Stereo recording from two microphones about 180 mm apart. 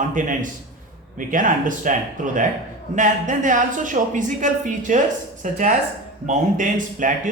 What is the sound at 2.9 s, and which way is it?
Speech, 45° right (ahead or behind).